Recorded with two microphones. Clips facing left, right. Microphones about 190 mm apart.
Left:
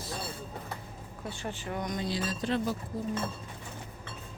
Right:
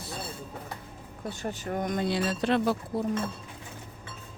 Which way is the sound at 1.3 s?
40° right (ahead or behind).